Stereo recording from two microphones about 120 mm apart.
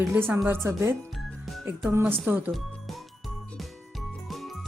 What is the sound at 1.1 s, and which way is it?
Music, centre (ahead or behind).